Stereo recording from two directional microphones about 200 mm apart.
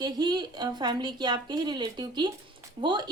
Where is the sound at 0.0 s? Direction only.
20° right (ahead or behind).